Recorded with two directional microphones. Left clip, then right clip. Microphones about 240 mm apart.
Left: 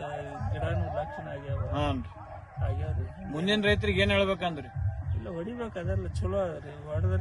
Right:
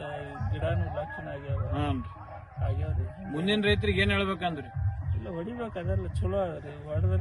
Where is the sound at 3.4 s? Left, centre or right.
Centre.